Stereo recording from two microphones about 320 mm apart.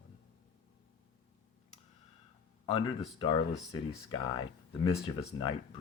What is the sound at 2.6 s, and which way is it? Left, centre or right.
Speech, centre.